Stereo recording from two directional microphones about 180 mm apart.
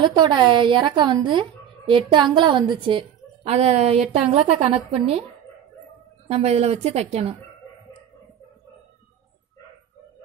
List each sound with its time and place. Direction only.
0.0 s speech: 25° right (ahead or behind)
6.2 s a woman's voice: 35° right (ahead or behind)